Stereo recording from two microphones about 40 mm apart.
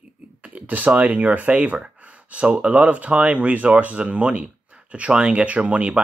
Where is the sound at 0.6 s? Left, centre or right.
Right.